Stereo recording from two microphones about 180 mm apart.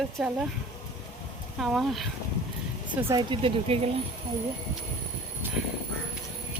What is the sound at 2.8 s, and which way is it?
Speech, 25° right (ahead or behind).